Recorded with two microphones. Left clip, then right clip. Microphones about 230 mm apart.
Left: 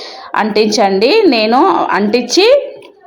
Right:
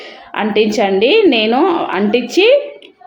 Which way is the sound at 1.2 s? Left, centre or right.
Centre.